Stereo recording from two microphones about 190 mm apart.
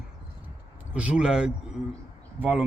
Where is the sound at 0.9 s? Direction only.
5° right (ahead or behind).